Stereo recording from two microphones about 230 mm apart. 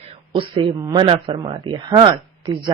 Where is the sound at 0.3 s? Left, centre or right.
Right.